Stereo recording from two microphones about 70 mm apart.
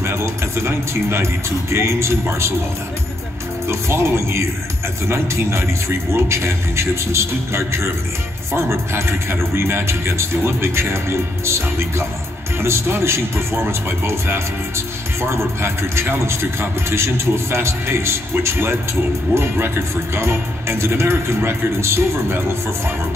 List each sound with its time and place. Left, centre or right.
0.0 s speech: right
3.6 s speech: right